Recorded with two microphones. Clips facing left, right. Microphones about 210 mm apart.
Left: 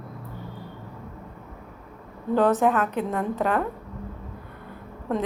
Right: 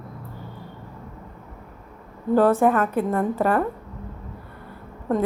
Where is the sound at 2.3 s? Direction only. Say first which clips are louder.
Right 3 dB; 10° right (ahead or behind).